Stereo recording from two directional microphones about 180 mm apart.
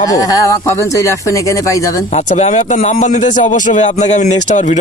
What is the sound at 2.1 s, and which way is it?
A man's voice, 40° left (ahead or behind).